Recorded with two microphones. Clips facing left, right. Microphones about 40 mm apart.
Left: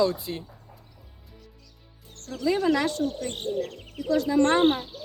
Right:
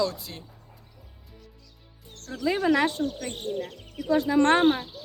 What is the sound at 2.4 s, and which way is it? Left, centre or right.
Speech, right.